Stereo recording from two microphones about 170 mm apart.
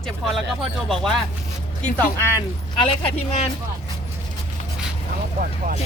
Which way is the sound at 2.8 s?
35° left (ahead or behind).